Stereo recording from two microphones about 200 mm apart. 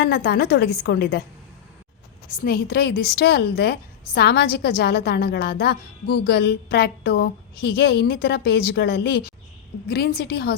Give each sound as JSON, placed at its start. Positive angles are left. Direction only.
{"t": 0.0, "sound": "a woman's voice", "side_deg": 55}
{"t": 2.3, "sound": "a woman's voice", "side_deg": 45}